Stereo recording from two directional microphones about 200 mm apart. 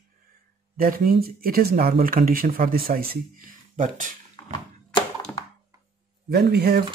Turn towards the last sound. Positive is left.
turn(degrees=-50)  # may be behind; listen again after turning